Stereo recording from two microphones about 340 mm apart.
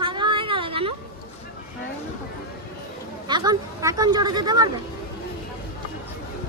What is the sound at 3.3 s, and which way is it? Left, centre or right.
Speech, centre.